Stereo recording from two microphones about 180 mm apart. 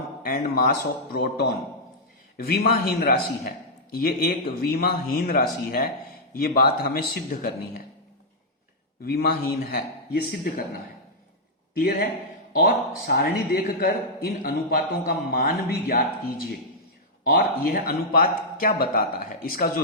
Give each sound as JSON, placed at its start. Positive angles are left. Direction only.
{"t": 0.3, "sound": "a man's voice", "side_deg": 55}
{"t": 2.5, "sound": "a man's voice", "side_deg": 55}
{"t": 9.0, "sound": "a man's voice", "side_deg": 60}
{"t": 11.8, "sound": "a man's voice", "side_deg": 55}